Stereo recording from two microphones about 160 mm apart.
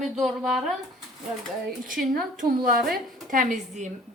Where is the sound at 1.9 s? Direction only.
55° right (ahead or behind).